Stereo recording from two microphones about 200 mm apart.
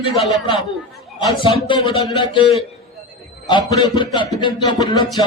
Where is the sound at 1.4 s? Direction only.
25° left (ahead or behind).